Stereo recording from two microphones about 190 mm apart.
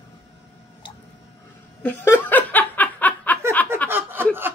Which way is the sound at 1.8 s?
10° left (ahead or behind).